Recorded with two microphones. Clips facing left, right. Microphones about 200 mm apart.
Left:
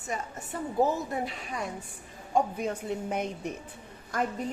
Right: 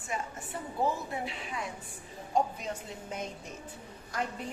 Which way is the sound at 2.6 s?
60° left (ahead or behind).